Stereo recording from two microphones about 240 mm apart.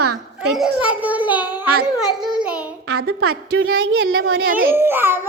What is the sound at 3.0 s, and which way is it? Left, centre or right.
A woman's voice, right.